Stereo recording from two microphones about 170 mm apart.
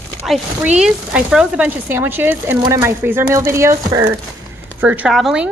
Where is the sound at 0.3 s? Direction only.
5° right (ahead or behind).